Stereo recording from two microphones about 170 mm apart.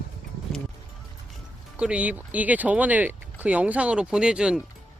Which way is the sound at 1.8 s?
5° right (ahead or behind).